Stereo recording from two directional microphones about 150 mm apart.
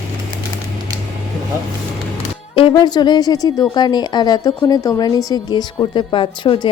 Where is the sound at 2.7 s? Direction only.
25° left (ahead or behind).